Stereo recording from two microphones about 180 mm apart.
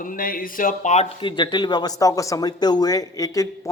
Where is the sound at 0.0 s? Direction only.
50° left (ahead or behind).